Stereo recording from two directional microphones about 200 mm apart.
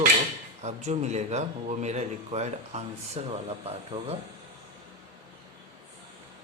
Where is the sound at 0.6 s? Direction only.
35° right (ahead or behind).